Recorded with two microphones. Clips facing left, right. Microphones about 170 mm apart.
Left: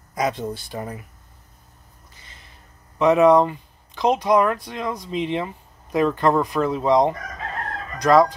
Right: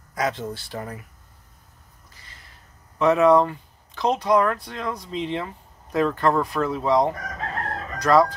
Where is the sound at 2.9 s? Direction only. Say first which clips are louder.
Left 2 dB; 15° left (ahead or behind).